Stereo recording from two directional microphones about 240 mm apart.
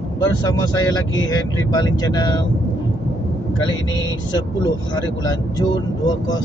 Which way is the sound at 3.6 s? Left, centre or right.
Centre.